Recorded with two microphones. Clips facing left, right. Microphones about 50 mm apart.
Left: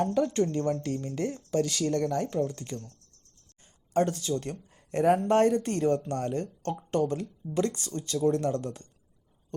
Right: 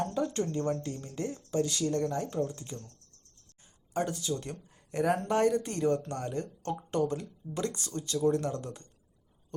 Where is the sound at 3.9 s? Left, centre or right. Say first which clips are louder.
Left 5 dB; left.